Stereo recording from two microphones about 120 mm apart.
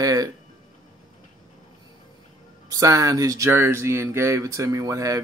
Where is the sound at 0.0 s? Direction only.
30° right (ahead or behind).